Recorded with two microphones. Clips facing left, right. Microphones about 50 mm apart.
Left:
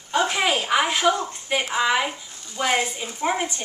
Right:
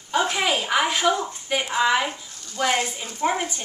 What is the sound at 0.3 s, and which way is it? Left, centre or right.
A woman's voice, centre.